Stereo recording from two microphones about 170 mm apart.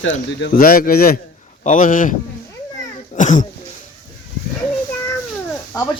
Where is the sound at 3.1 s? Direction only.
45° left (ahead or behind).